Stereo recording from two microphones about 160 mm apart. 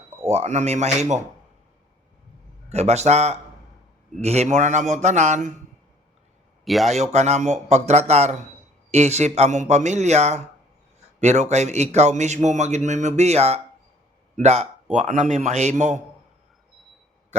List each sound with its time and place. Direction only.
0.3 s a man's voice: 45° right (ahead or behind)
2.6 s a man's voice: 40° right (ahead or behind)
6.7 s speech: centre (ahead or behind)
6.9 s a man's voice: 45° right (ahead or behind)